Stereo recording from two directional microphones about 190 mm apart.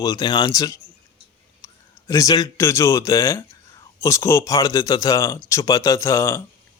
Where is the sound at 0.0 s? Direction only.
20° left (ahead or behind).